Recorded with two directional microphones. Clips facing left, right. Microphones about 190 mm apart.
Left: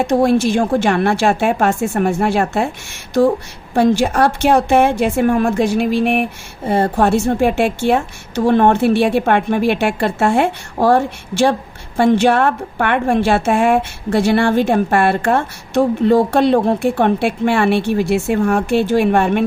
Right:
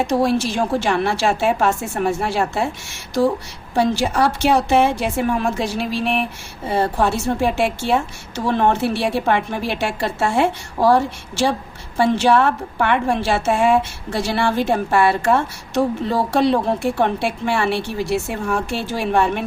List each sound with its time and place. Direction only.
0.1 s a woman's voice: 55° left (ahead or behind)
3.8 s a woman's voice: 55° left (ahead or behind)